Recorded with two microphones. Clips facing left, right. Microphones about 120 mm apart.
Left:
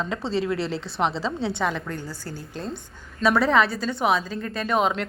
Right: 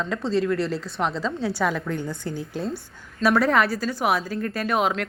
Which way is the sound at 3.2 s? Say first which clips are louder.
Even; centre (ahead or behind).